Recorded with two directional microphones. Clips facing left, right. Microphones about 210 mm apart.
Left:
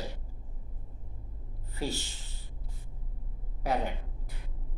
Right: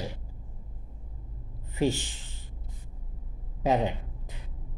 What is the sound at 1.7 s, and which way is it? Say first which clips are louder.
Speech: right 8 dB; 20° right (ahead or behind).